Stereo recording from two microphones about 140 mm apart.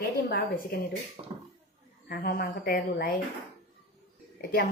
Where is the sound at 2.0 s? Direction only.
90° left.